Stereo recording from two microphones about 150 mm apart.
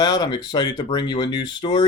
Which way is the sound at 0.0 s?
30° left (ahead or behind).